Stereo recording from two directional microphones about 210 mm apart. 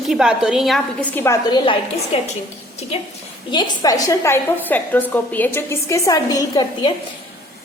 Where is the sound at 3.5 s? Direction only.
20° left (ahead or behind).